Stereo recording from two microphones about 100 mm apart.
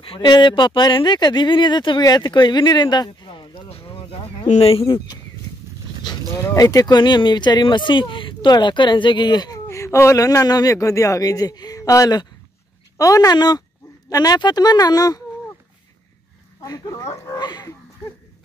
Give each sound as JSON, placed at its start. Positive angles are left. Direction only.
{"t": 0.2, "sound": "speech", "side_deg": 50}
{"t": 3.6, "sound": "speech", "side_deg": 75}
{"t": 6.3, "sound": "speech", "side_deg": 30}
{"t": 9.7, "sound": "a man's voice", "side_deg": 30}
{"t": 16.6, "sound": "a man's voice", "side_deg": 40}